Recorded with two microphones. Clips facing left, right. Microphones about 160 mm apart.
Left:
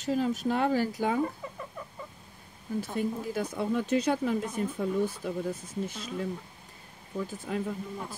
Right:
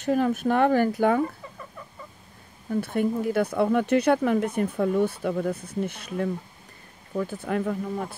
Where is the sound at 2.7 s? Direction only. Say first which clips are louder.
Right 6 dB; 60° right (ahead or behind).